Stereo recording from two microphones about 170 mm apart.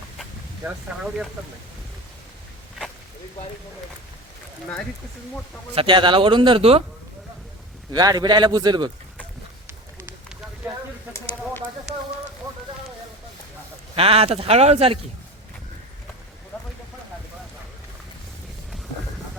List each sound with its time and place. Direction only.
5.7 s a man's voice: 30° right (ahead or behind)
7.9 s a man's voice: 25° right (ahead or behind)
13.9 s speech: 35° right (ahead or behind)